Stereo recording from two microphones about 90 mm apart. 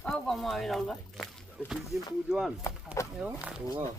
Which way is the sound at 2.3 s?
Centre (ahead or behind).